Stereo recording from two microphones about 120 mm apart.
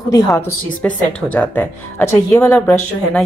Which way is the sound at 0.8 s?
10° left (ahead or behind).